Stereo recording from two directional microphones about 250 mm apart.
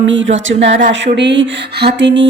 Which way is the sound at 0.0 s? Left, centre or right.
Right.